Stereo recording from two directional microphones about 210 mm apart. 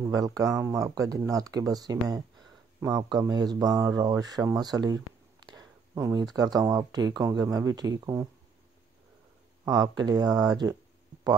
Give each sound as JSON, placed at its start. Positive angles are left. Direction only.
{"t": 0.0, "sound": "speech", "side_deg": -15}
{"t": 9.7, "sound": "speech", "side_deg": -20}